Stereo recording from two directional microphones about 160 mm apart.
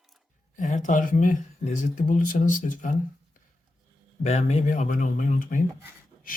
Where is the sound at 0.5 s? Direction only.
50° left (ahead or behind).